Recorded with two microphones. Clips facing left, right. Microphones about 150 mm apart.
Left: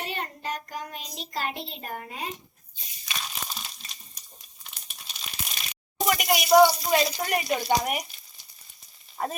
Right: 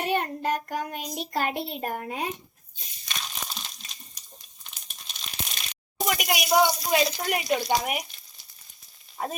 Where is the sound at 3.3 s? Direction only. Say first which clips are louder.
Even; centre (ahead or behind).